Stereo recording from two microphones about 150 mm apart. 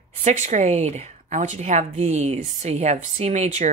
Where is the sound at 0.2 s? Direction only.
50° right (ahead or behind).